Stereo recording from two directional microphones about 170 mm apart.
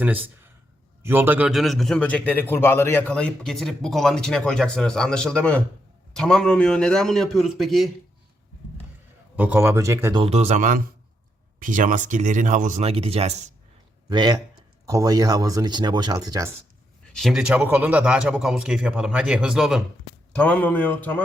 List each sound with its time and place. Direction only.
1.0 s a man's voice: 10° right (ahead or behind)
9.3 s speech: 10° right (ahead or behind)
10.2 s speech: 35° right (ahead or behind)
14.1 s speech: 25° right (ahead or behind)
17.1 s a man's voice: centre (ahead or behind)
20.3 s a man's voice: 10° left (ahead or behind)